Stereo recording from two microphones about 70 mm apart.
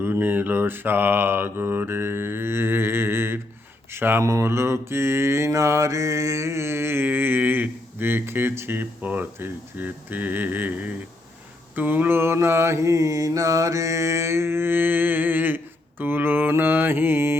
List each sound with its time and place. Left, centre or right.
0.0 s mantra: right
4.2 s mantra: right
9.0 s speech: right
11.7 s mantra: right